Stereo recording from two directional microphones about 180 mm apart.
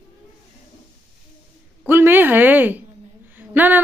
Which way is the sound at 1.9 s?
10° right (ahead or behind).